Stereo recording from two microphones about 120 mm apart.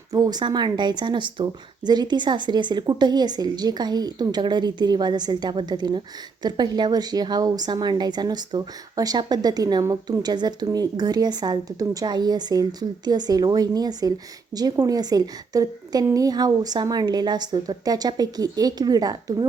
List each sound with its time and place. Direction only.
0.1 s speech: 30° right (ahead or behind)